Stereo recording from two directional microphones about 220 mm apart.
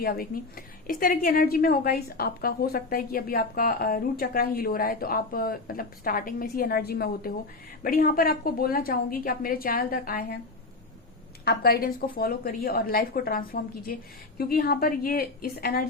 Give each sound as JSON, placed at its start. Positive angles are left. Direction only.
{"t": 0.0, "sound": "a woman's voice", "side_deg": 40}
{"t": 11.4, "sound": "a woman's voice", "side_deg": 45}